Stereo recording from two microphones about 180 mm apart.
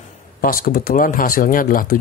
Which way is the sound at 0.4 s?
50° left (ahead or behind).